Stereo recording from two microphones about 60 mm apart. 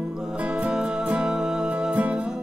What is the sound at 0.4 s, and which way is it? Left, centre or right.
Music, right.